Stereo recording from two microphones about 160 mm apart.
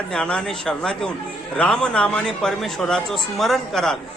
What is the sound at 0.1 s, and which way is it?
A man's voice, 5° left (ahead or behind).